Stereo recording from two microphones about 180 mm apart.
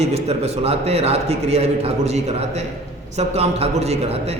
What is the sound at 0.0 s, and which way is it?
A man's voice, 35° right (ahead or behind).